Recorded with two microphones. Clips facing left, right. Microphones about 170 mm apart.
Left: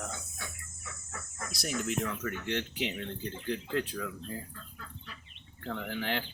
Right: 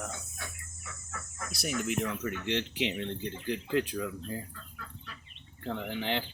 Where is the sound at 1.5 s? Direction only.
5° right (ahead or behind).